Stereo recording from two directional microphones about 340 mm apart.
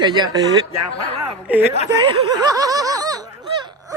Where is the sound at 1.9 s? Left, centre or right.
Centre.